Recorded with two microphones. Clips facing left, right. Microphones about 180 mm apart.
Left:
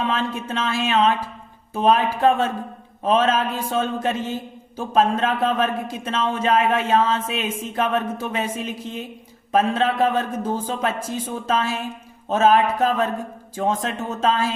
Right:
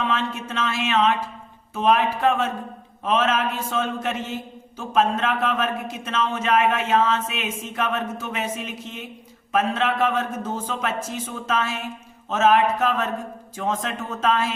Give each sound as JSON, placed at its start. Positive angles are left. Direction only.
{"t": 0.1, "sound": "speech", "side_deg": 35}